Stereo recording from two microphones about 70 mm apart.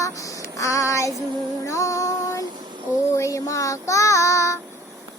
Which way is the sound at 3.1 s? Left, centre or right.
Left.